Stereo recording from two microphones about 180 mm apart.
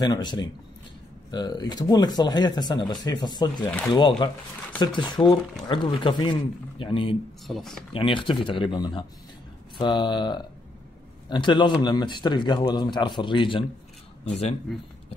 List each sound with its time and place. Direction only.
0.0 s speech: 25° left (ahead or behind)
3.6 s speech: 10° left (ahead or behind)
4.2 s speech: 25° left (ahead or behind)
7.4 s speech: centre (ahead or behind)
7.9 s speech: 30° left (ahead or behind)
14.7 s speech: centre (ahead or behind)